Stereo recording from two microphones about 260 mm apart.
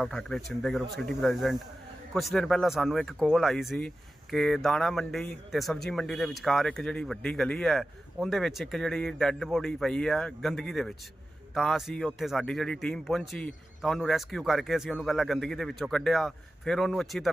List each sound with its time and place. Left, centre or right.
0.0 s speech: centre